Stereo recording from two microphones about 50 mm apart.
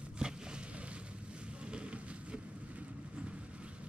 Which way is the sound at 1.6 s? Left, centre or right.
Right.